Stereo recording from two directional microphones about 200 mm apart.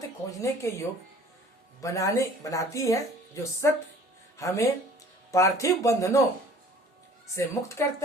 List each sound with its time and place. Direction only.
0.3 s speech: 15° left (ahead or behind)
7.3 s speech: 15° left (ahead or behind)